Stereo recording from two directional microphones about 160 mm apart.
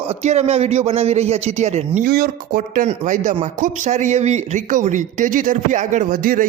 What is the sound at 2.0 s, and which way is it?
A man's voice, 70° right (ahead or behind).